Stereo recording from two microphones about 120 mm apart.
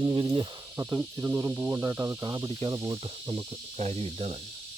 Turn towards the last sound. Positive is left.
turn(degrees=-60)  # may be behind; listen again after turning